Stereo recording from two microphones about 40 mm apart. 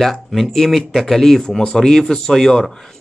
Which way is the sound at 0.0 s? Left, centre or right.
Centre.